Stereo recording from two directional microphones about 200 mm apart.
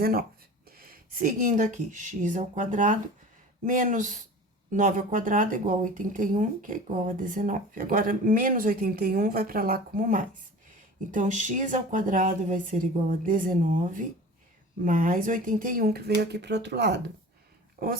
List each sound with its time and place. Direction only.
0.0 s a woman's voice: 50° right (ahead or behind)
17.8 s speech: 45° right (ahead or behind)